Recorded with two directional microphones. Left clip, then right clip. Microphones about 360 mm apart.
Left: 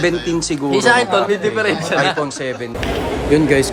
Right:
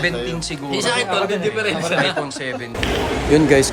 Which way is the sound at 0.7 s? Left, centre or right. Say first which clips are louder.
Left 6 dB; left.